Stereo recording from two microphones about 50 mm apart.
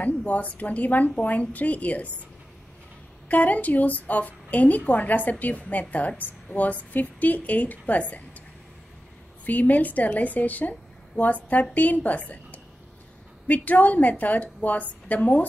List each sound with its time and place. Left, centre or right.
0.3 s a woman's voice: left
3.3 s a woman's voice: left
9.5 s a woman's voice: left